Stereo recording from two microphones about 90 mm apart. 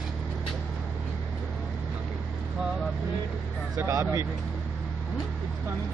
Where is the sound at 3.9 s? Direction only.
40° right (ahead or behind).